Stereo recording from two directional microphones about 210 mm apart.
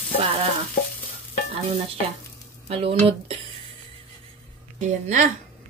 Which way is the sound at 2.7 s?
25° right (ahead or behind).